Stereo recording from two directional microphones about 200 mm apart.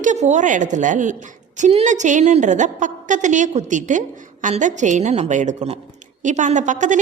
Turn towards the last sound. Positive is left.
turn(degrees=-40)  # may be behind; listen again after turning